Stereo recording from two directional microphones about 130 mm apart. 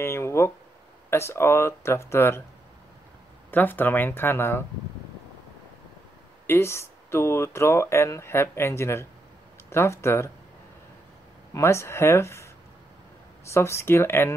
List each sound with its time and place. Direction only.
0.0 s a sound: 20° left (ahead or behind)
1.1 s speech: 20° left (ahead or behind)
3.5 s speech: 15° left (ahead or behind)
6.4 s speech: 20° left (ahead or behind)
11.5 s speech: 20° left (ahead or behind)
13.5 s speech: 20° left (ahead or behind)